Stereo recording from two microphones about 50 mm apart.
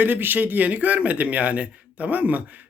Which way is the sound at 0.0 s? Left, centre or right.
Right.